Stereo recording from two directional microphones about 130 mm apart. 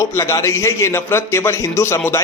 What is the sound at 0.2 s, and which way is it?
A man's voice, 25° left (ahead or behind).